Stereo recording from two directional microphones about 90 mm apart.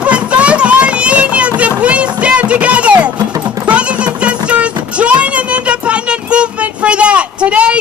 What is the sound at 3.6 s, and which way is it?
Music, 15° right (ahead or behind).